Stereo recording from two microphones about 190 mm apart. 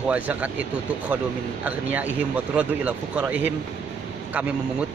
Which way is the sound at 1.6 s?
10° right (ahead or behind).